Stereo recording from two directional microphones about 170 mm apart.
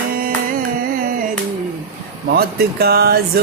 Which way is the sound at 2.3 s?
65° right (ahead or behind).